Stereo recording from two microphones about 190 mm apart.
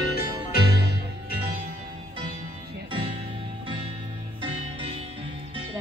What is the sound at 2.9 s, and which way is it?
Music, 30° right (ahead or behind).